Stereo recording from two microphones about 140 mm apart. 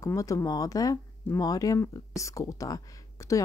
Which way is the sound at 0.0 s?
25° left (ahead or behind).